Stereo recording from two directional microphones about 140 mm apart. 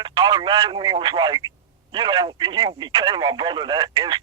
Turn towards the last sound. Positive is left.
turn(degrees=-25)  # may be behind; listen again after turning